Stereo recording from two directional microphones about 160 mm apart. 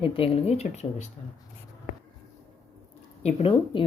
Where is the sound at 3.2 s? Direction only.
45° left (ahead or behind).